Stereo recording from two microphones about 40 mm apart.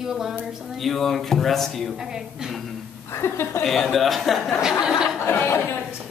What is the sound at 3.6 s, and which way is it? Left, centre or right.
Speech, centre.